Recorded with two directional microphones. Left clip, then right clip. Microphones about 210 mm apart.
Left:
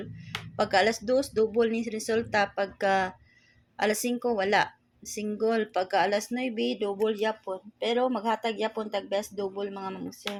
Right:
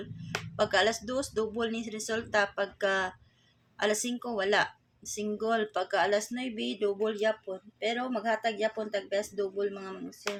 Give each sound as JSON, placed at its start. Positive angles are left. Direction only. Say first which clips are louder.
{"t": 0.5, "sound": "a woman's voice", "louder": "left 2 dB", "side_deg": 25}